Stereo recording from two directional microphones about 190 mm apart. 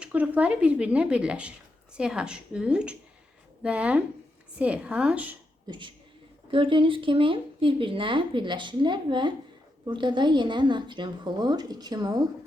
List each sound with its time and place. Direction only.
0.0 s a woman's voice: 10° right (ahead or behind)
5.6 s speech: 25° right (ahead or behind)